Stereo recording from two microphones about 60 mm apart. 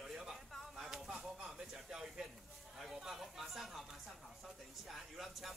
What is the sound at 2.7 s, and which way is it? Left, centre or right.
Speech, centre.